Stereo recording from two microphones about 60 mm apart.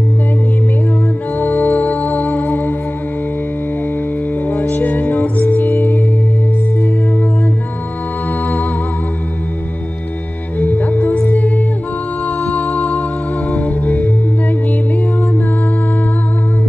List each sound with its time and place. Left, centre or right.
1.4 s music: left
4.5 s music: left
10.6 s music: left